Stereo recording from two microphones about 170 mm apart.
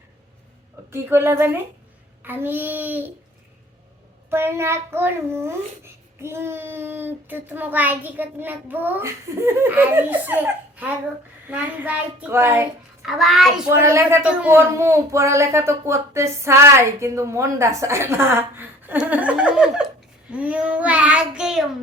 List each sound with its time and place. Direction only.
0.9 s a child's voice: 15° right (ahead or behind)
4.3 s a child's voice: 15° right (ahead or behind)
13.0 s a child's voice: centre (ahead or behind)
13.7 s a child's voice: 15° right (ahead or behind)